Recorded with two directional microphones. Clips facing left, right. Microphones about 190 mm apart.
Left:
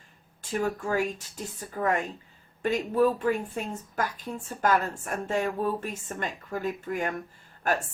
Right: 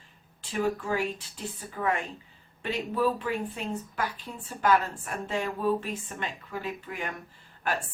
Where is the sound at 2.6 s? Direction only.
45° left (ahead or behind).